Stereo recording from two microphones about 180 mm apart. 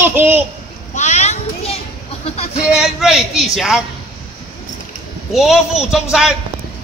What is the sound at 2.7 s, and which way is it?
Speech, 5° right (ahead or behind).